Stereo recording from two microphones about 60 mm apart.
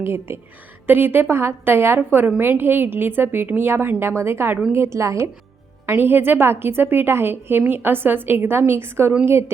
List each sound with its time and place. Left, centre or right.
0.0 s a woman's voice: right
5.9 s a woman's voice: right